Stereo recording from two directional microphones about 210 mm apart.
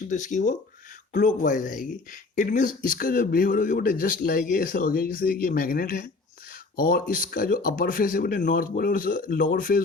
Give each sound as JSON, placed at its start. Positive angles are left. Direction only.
{"t": 0.1, "sound": "speech", "side_deg": 35}